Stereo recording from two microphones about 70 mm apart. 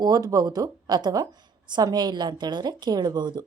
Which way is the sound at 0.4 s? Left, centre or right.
Right.